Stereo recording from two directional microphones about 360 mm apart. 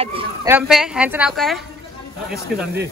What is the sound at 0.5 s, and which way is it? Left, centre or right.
A woman's voice, centre.